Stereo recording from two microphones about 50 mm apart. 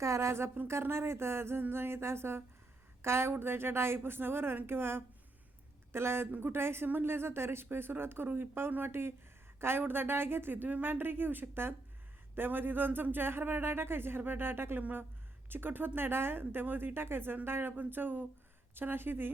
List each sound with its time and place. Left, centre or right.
0.0 s speech: right
14.8 s a woman's voice: right
15.4 s speech: right